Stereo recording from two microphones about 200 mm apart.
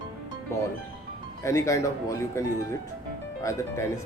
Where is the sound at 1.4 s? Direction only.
15° left (ahead or behind).